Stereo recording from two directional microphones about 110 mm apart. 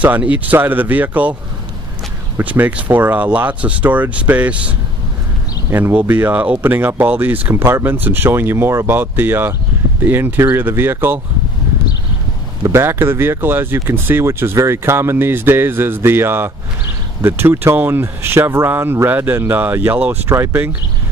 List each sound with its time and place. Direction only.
0.0 s speech: 15° right (ahead or behind)
2.3 s speech: 15° right (ahead or behind)
12.6 s speech: 25° right (ahead or behind)